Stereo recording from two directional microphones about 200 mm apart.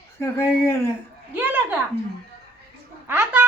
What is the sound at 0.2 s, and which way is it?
Speech, 15° left (ahead or behind).